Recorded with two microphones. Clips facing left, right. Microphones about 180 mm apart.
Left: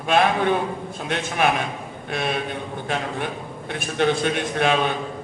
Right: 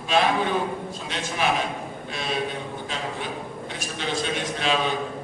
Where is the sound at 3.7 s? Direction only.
60° left (ahead or behind).